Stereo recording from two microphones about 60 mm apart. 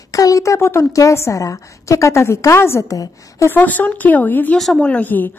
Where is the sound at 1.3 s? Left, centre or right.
Left.